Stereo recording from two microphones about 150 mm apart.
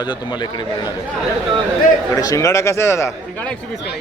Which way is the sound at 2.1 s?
20° left (ahead or behind).